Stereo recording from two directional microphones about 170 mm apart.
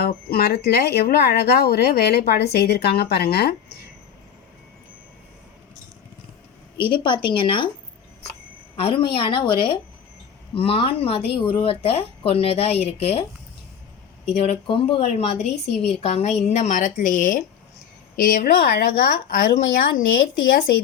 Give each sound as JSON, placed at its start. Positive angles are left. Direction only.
{"t": 0.0, "sound": "speech", "side_deg": 65}
{"t": 7.0, "sound": "speech", "side_deg": 30}
{"t": 8.7, "sound": "a woman's voice", "side_deg": 35}
{"t": 14.3, "sound": "a woman's voice", "side_deg": 35}